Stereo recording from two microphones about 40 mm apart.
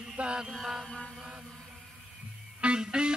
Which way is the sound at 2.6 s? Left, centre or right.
Right.